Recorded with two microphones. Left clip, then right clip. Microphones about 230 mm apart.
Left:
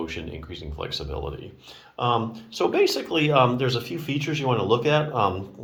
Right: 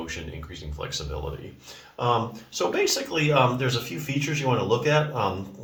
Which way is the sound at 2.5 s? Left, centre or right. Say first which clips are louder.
Left 3 dB; centre.